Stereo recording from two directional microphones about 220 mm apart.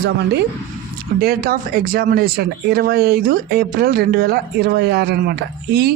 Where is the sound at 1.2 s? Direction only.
40° right (ahead or behind).